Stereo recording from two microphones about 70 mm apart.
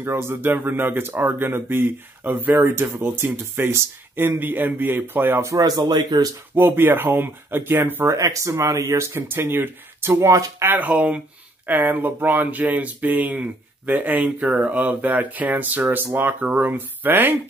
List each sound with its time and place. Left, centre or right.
0.0 s speech: right
5.9 s speech: right
6.5 s speech: right
8.2 s speech: right